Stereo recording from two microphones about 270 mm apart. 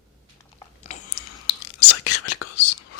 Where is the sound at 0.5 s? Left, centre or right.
Left.